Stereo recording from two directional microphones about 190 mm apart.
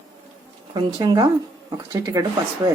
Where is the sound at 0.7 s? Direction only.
20° right (ahead or behind).